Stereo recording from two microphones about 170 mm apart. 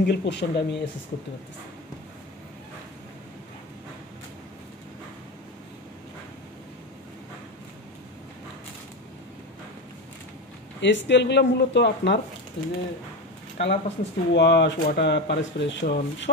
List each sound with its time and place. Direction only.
0.0 s speech: 85° left
10.8 s speech: 90° left